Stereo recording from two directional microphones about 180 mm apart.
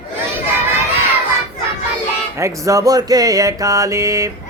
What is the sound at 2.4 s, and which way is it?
Mantra, 15° right (ahead or behind).